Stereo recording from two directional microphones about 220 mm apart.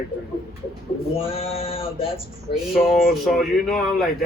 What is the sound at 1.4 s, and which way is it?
Male singing, 25° left (ahead or behind).